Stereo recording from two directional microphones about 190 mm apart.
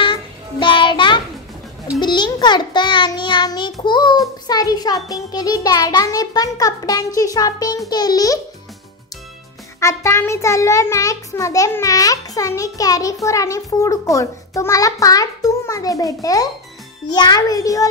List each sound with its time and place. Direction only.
0.0 s music: 25° left (ahead or behind)
1.9 s a child's voice: 25° left (ahead or behind)
9.8 s a child's voice: 15° left (ahead or behind)